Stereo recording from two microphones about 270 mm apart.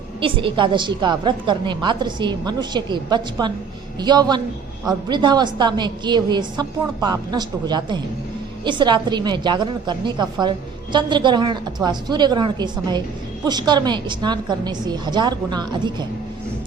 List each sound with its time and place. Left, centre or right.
0.2 s a woman's voice: centre